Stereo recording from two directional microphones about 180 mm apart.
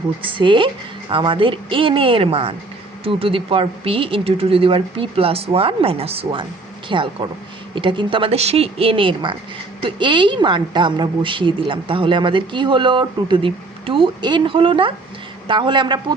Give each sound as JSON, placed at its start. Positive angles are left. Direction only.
{"t": 0.2, "sound": "a woman's voice", "side_deg": -25}